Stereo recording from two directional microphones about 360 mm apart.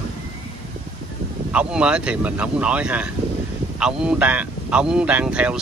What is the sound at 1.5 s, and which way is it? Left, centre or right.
Speech, centre.